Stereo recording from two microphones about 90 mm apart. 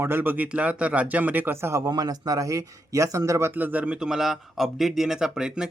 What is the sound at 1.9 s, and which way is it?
Speech, 45° right (ahead or behind).